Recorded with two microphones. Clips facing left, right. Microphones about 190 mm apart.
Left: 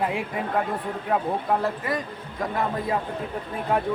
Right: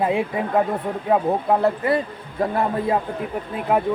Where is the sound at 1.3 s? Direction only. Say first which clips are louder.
Right 5 dB; 45° right (ahead or behind).